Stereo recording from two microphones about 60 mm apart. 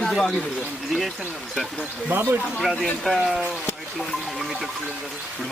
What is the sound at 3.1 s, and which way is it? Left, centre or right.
Speech, centre.